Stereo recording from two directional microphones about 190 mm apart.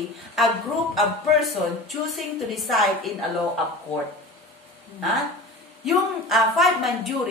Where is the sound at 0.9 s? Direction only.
Centre (ahead or behind).